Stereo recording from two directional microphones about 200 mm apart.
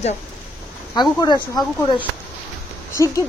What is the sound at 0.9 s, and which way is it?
Speech, 20° left (ahead or behind).